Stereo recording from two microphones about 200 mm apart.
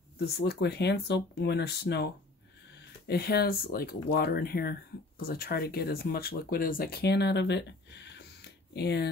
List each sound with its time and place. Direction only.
0.4 s speech: 55° left (ahead or behind)
3.1 s speech: 50° left (ahead or behind)